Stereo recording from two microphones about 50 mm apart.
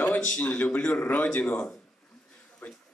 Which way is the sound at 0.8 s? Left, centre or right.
Centre.